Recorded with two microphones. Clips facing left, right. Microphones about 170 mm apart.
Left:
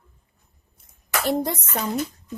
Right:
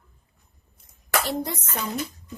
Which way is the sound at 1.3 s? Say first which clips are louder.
Left 5 dB; 55° left (ahead or behind).